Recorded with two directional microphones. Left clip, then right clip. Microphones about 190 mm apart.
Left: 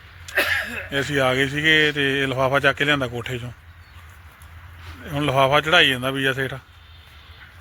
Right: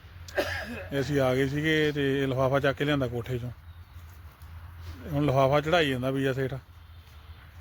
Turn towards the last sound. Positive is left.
turn(degrees=0)  # may be behind; listen again after turning